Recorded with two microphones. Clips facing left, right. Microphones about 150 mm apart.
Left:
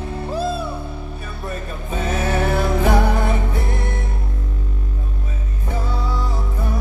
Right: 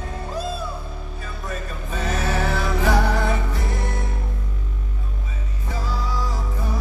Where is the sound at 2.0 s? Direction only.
55° left (ahead or behind).